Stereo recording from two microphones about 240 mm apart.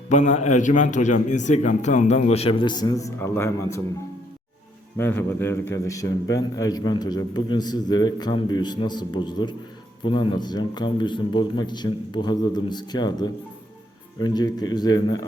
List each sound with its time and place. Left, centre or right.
0.1 s a man's voice: left; by 3.8 s centre
4.9 s a man's voice: centre